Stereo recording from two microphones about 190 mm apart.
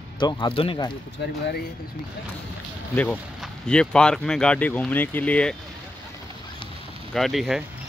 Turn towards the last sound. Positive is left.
turn(degrees=0)  # may be behind; listen again after turning